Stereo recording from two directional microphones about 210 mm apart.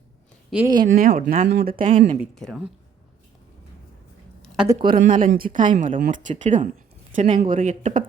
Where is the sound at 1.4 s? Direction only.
50° right (ahead or behind).